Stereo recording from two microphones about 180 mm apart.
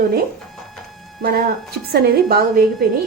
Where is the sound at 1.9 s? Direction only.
60° right (ahead or behind).